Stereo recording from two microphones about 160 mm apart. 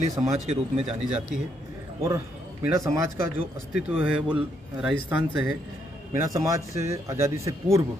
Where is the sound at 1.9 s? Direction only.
20° right (ahead or behind).